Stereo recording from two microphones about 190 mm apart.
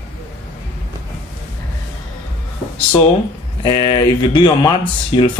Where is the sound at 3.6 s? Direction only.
25° left (ahead or behind).